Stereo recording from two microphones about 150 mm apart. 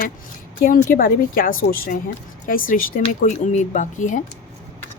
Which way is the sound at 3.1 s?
55° left (ahead or behind).